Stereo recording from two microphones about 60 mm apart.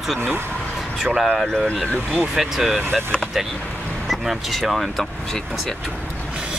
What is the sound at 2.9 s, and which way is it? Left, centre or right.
Speech, centre.